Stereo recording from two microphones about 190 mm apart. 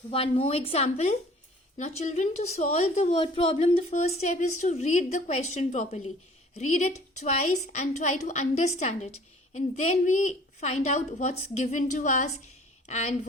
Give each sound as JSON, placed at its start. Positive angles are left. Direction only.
{"t": 0.1, "sound": "a woman's voice", "side_deg": 30}